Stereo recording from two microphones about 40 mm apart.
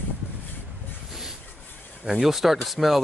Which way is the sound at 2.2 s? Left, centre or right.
Centre.